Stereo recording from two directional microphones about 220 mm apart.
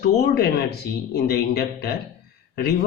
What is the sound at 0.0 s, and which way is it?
Speech, 45° left (ahead or behind).